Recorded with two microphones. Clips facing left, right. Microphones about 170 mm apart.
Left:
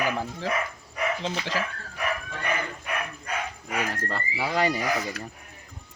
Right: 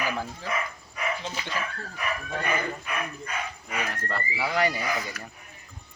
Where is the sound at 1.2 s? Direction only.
90° left.